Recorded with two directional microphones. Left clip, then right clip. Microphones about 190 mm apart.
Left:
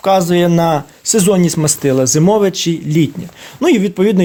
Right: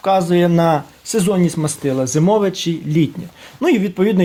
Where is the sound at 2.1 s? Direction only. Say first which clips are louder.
Left 3 dB; 15° left (ahead or behind).